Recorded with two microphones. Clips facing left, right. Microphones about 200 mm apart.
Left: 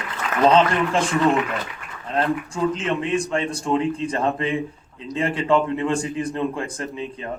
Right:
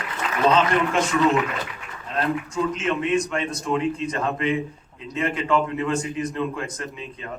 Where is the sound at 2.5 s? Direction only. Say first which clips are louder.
Left 1 dB; 30° left (ahead or behind).